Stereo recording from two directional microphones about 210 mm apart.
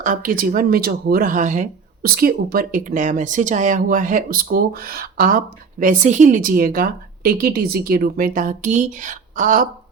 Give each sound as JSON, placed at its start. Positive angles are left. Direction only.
{"t": 0.0, "sound": "speech", "side_deg": -40}